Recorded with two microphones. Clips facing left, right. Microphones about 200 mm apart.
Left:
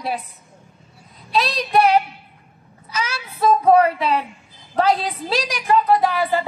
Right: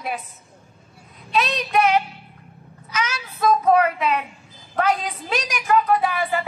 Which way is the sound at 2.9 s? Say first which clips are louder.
Even; 30° left (ahead or behind).